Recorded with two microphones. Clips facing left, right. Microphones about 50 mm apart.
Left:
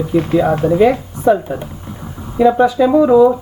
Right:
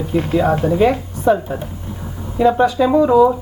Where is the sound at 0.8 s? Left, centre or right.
Centre.